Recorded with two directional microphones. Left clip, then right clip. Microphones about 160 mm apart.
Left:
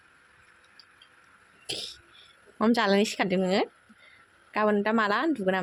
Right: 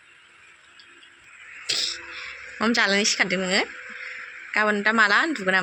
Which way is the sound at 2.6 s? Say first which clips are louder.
Right 3 dB; 30° left (ahead or behind).